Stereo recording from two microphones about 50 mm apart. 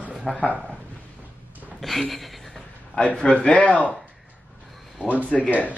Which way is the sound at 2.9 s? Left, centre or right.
Left.